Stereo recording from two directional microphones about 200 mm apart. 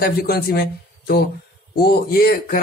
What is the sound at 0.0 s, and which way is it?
A man's voice, 45° left (ahead or behind).